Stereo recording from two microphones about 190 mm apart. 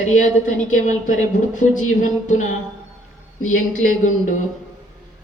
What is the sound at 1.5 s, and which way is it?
Speech, 40° left (ahead or behind).